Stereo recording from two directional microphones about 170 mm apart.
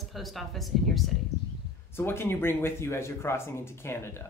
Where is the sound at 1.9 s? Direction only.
15° left (ahead or behind).